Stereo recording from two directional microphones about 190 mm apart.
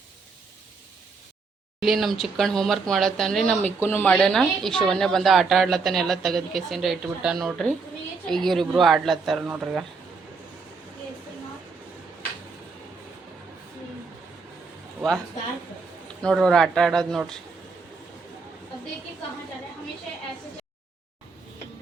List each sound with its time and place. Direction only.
1.8 s speech: centre (ahead or behind)
16.2 s speech: 5° left (ahead or behind)